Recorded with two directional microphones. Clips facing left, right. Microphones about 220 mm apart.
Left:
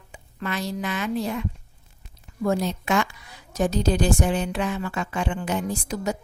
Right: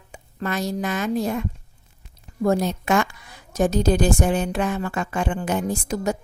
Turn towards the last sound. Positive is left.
turn(degrees=-45)  # may be behind; listen again after turning